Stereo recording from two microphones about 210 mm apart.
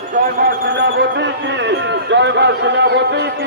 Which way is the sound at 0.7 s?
55° right (ahead or behind).